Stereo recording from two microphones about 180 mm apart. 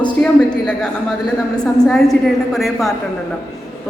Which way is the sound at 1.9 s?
Centre (ahead or behind).